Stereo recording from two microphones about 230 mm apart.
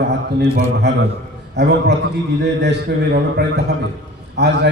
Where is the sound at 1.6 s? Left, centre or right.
Right.